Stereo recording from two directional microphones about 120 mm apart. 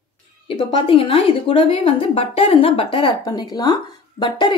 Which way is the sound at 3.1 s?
35° left (ahead or behind).